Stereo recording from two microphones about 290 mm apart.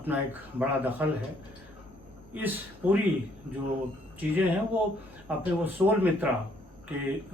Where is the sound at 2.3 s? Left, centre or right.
Centre.